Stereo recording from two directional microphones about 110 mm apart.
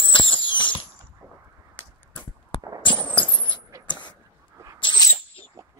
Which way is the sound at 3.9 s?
45° left (ahead or behind).